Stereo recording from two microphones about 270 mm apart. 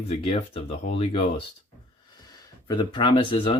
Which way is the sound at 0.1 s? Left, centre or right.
Left.